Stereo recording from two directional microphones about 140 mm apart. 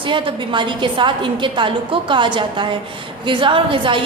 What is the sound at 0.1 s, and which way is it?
A woman's voice, 35° right (ahead or behind).